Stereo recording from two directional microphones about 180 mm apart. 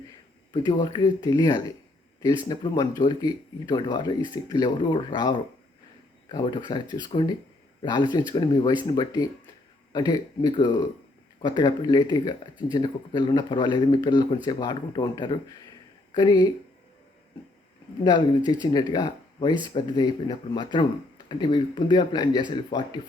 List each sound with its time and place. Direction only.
0.6 s speech: 25° left (ahead or behind)
18.0 s speech: 20° left (ahead or behind)